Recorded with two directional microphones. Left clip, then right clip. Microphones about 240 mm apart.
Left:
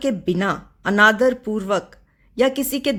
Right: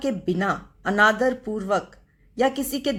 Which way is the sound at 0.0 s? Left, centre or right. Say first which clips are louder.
Left 3 dB; left.